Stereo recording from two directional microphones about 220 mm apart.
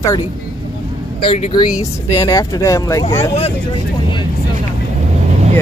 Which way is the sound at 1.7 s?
15° left (ahead or behind).